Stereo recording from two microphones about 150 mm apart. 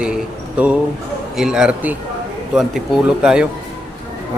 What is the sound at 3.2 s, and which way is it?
Speech, 5° right (ahead or behind).